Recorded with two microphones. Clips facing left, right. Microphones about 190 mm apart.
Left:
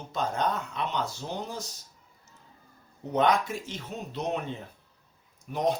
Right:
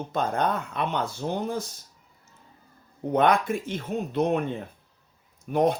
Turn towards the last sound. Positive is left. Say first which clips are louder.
# right 5 dB
turn(degrees=-55)  # may be behind; listen again after turning